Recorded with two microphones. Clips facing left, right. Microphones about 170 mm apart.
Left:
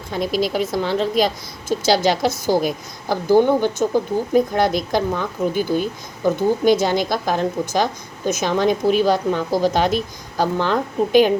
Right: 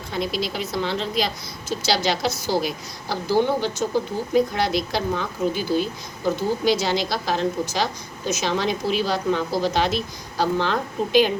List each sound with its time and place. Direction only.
0.1 s a woman's voice: 45° left (ahead or behind)